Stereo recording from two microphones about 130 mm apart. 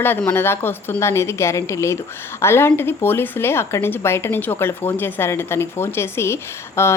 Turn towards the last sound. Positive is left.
turn(degrees=20)  # may be behind; listen again after turning